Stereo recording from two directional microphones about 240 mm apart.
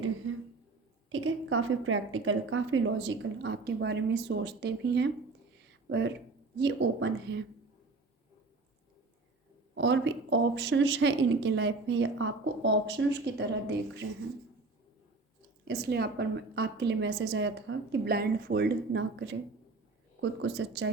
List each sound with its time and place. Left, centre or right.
1.1 s a woman's voice: right
9.7 s a woman's voice: right
14.0 s speech: right
15.6 s a woman's voice: right